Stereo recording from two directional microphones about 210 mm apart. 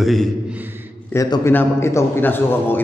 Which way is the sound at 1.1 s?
15° left (ahead or behind).